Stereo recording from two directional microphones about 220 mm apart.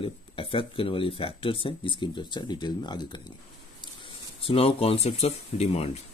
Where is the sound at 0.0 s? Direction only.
25° left (ahead or behind).